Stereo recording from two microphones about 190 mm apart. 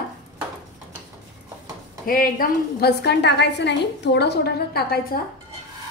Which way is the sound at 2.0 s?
50° left (ahead or behind).